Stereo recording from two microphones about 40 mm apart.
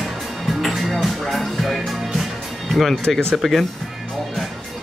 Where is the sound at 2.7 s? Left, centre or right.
Centre.